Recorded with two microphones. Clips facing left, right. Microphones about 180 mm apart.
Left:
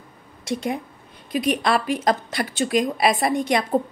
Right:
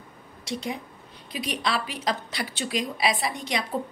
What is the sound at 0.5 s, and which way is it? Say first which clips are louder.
A woman's voice: left 6 dB; 50° left (ahead or behind).